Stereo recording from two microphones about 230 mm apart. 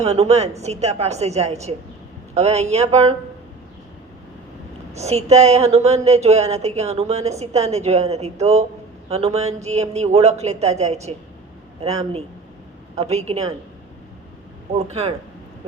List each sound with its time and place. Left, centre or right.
0.0 s a woman's voice: right
4.9 s a woman's voice: right
14.7 s a woman's voice: right